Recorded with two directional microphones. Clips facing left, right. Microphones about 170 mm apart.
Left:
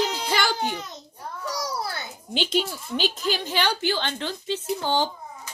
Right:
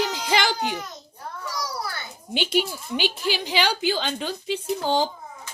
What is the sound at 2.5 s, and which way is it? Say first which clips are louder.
A woman's voice: right 2 dB; 5° right (ahead or behind).